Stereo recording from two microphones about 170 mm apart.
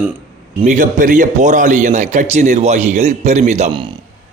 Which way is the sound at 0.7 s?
50° right (ahead or behind).